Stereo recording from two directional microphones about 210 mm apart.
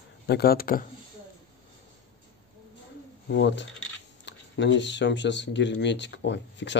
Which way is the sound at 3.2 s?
55° left (ahead or behind).